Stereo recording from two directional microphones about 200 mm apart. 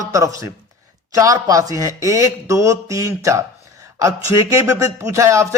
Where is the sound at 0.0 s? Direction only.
15° right (ahead or behind).